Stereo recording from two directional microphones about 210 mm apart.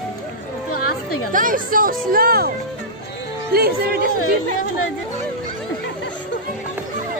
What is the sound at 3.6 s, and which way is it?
Speech, 45° right (ahead or behind).